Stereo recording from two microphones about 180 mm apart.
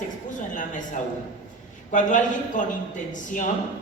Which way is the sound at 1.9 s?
45° left (ahead or behind).